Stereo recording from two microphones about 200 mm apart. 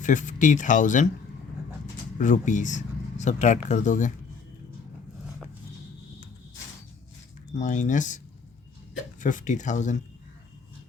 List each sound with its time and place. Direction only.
0.0 s speech: 40° left (ahead or behind)
2.1 s speech: 40° left (ahead or behind)
7.5 s speech: 35° left (ahead or behind)
9.2 s speech: 40° left (ahead or behind)